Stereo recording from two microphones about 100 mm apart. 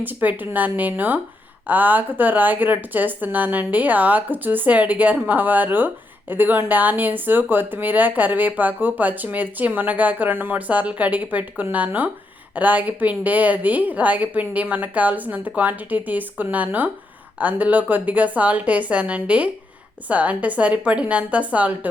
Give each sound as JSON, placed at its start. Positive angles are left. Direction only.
{"t": 0.0, "sound": "a woman's voice", "side_deg": -20}